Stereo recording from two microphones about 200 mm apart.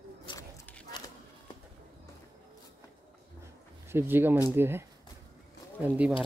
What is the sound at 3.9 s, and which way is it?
Speech, 10° right (ahead or behind).